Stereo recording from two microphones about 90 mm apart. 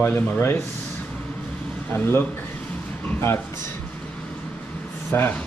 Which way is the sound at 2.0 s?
25° left (ahead or behind).